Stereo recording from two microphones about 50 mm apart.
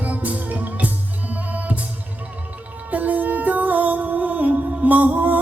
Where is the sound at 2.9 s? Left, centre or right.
Right.